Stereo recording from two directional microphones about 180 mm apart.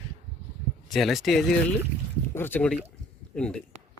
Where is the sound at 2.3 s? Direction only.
10° left (ahead or behind).